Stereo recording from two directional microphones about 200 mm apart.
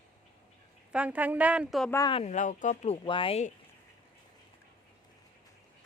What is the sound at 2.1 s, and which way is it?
Speech, 35° left (ahead or behind).